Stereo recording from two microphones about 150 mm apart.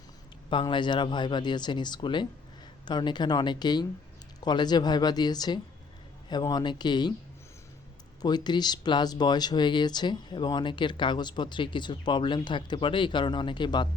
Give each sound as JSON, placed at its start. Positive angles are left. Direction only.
{"t": 0.5, "sound": "speech", "side_deg": 30}
{"t": 8.2, "sound": "speech", "side_deg": 30}